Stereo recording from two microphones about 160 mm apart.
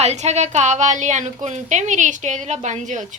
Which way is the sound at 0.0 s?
45° right (ahead or behind).